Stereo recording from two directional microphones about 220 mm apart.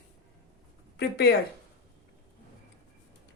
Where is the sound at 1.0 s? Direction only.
50° left (ahead or behind).